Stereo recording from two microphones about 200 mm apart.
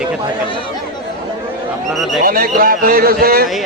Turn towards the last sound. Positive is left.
turn(degrees=-50)  # may be behind; listen again after turning